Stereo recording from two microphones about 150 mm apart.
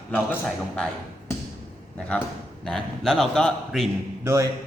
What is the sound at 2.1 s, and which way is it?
A man's voice, 10° left (ahead or behind).